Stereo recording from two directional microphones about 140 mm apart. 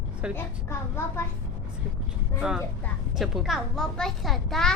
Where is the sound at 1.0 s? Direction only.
15° left (ahead or behind).